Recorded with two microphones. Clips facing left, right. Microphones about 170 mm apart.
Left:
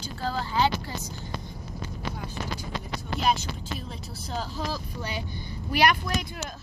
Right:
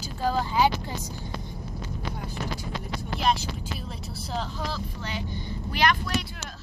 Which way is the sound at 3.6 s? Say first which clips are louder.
Even; centre (ahead or behind).